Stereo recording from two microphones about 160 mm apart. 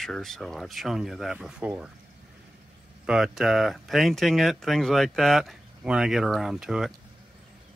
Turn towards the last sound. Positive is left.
turn(degrees=-5)  # may be behind; listen again after turning